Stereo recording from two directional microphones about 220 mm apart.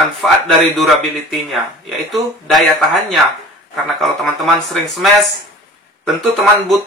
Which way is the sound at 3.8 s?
Centre (ahead or behind).